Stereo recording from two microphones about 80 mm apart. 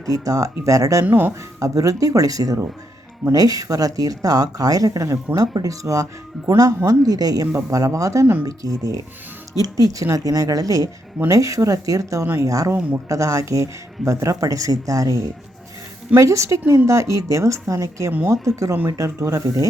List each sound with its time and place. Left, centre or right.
0.0 s speech: right
1.0 s speech: right
1.5 s speech: right
12.2 s a woman's voice: right
12.5 s a woman's voice: right